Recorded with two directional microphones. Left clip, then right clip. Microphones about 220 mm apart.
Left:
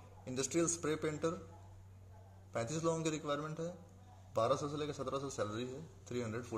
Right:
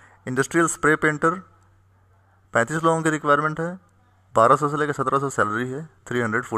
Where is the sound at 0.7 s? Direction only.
35° right (ahead or behind).